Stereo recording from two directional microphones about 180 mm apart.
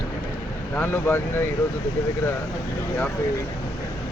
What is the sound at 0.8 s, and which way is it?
Speech, 10° left (ahead or behind).